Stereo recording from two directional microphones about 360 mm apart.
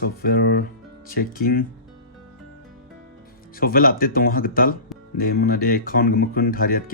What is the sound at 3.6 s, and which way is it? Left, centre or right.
Speech, left.